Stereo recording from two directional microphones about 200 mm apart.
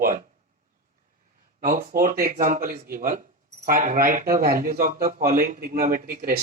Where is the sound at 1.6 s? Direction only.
45° right (ahead or behind).